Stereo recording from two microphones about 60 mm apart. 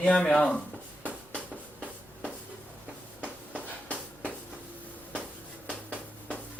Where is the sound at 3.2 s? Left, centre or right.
Right.